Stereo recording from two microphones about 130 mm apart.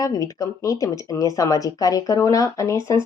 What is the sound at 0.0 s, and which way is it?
A woman's voice, 25° left (ahead or behind).